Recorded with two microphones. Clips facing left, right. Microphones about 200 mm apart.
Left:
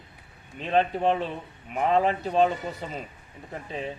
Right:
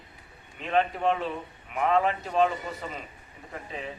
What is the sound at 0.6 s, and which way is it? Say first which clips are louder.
A man's voice: left 2 dB; 30° left (ahead or behind).